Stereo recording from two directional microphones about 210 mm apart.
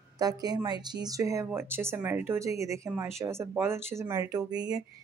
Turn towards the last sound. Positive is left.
turn(degrees=-20)  # may be behind; listen again after turning